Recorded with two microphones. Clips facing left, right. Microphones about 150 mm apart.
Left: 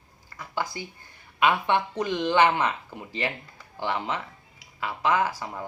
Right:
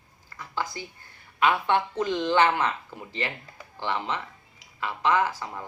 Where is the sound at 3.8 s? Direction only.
15° left (ahead or behind).